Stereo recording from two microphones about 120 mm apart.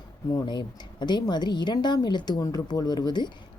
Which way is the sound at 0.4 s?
40° left (ahead or behind).